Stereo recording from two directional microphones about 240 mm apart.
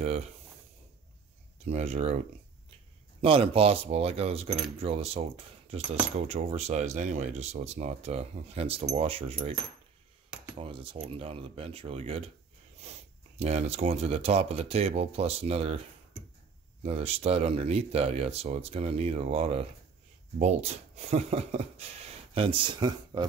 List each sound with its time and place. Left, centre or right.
0.0 s speech: right
1.7 s speech: right
13.4 s speech: right